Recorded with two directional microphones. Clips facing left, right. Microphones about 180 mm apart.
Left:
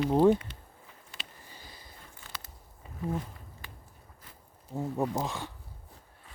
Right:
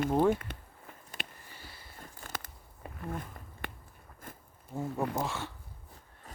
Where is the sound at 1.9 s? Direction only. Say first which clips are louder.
Right 7 dB; 50° right (ahead or behind).